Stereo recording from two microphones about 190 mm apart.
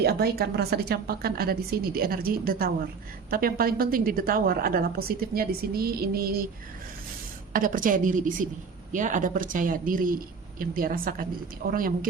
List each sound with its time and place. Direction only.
0.0 s a woman's voice: 55° right (ahead or behind)
7.5 s a woman's voice: 45° right (ahead or behind)